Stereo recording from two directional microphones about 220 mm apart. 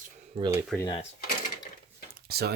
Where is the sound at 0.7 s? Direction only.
5° left (ahead or behind).